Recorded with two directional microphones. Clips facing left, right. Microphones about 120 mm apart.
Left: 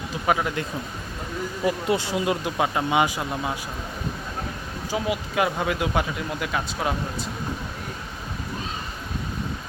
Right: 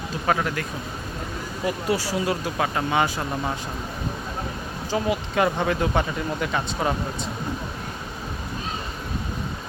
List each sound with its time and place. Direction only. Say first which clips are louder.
0.3 s speech: even; 10° left (ahead or behind)
1.6 s speech: left 1 dB; 20° left (ahead or behind)
4.9 s speech: right 2 dB; 5° left (ahead or behind)